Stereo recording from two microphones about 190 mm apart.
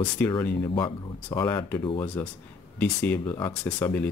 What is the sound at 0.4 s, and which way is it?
Speech, 10° left (ahead or behind).